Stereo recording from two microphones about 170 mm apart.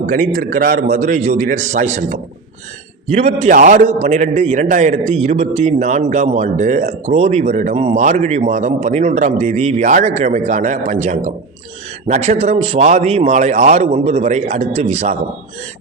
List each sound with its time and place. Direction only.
0.0 s a man's voice: 50° right (ahead or behind)